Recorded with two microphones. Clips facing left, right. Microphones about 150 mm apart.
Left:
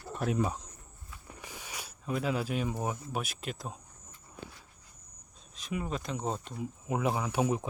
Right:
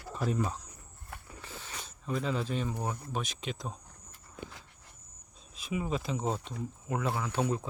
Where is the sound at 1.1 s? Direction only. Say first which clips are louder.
Right 7 dB; 65° right (ahead or behind).